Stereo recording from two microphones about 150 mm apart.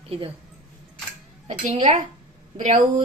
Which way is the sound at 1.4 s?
55° right (ahead or behind).